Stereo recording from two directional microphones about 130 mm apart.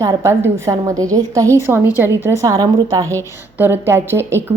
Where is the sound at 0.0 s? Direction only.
20° right (ahead or behind).